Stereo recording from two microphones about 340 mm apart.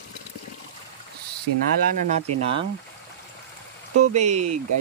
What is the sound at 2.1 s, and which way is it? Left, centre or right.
Speech, centre.